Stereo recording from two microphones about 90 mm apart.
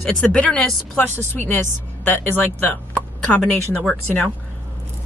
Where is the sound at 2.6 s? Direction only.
15° left (ahead or behind).